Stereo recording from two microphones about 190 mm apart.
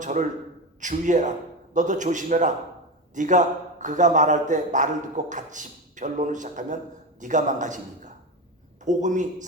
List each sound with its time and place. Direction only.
0.0 s a man's voice: 40° right (ahead or behind)